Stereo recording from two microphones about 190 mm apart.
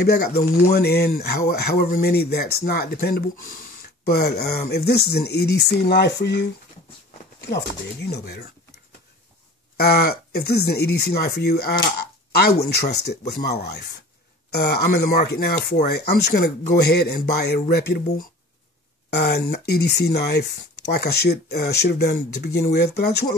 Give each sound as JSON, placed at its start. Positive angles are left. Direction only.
{"t": 0.0, "sound": "speech", "side_deg": 55}
{"t": 7.4, "sound": "speech", "side_deg": 60}
{"t": 9.8, "sound": "speech", "side_deg": 55}